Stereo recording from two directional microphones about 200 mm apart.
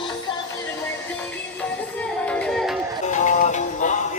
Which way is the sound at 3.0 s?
40° left (ahead or behind).